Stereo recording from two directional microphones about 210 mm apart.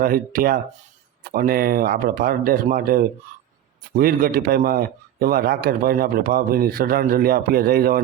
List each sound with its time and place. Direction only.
0.0 s a man's voice: 45° right (ahead or behind)